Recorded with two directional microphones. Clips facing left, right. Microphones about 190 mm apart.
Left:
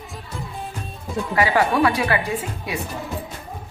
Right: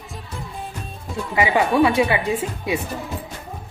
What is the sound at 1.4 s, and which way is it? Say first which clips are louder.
Speech: right 2 dB; 20° right (ahead or behind).